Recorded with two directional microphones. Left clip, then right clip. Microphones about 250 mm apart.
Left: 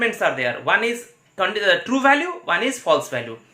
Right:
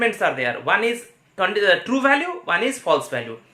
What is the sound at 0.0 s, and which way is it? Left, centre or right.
A man's voice, centre.